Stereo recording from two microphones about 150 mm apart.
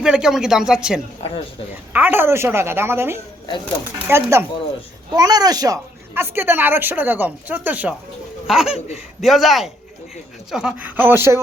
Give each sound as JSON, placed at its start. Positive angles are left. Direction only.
{"t": 0.0, "sound": "a woman's voice", "side_deg": -5}